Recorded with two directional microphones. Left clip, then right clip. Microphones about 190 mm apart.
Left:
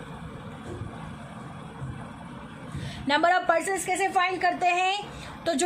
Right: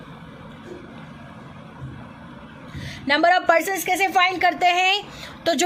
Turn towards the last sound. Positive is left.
turn(degrees=-35)  # may be behind; listen again after turning